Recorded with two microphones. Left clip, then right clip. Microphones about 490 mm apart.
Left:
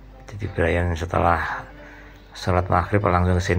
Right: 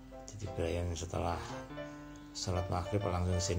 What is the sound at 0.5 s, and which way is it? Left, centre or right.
Speech, right.